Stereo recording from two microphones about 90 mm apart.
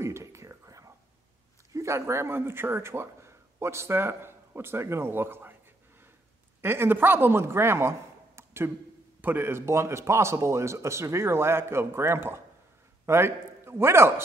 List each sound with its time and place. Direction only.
0.0 s whispering: 30° right (ahead or behind)
1.7 s speech: 30° right (ahead or behind)
6.6 s speech: 25° right (ahead or behind)
8.4 s a sound: 25° right (ahead or behind)
9.2 s a man's voice: 25° right (ahead or behind)